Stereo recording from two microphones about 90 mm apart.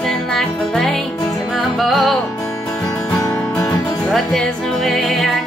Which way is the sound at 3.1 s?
35° left (ahead or behind).